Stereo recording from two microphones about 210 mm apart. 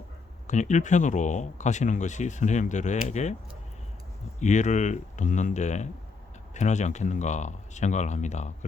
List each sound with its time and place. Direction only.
0.4 s speech: 35° left (ahead or behind)
4.4 s speech: 35° left (ahead or behind)